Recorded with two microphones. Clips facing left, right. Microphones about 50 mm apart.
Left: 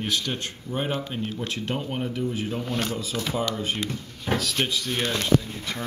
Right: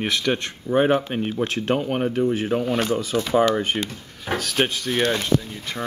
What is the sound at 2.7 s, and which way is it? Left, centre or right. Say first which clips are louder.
Speech: right 5 dB; centre.